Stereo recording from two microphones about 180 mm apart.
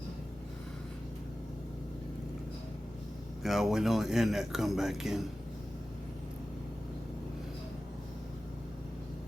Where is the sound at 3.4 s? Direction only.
Centre (ahead or behind).